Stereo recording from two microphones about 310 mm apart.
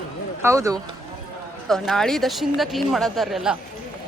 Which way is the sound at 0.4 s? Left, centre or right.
Centre.